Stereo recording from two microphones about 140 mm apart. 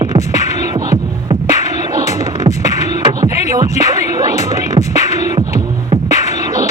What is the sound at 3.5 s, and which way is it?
Music, 25° right (ahead or behind).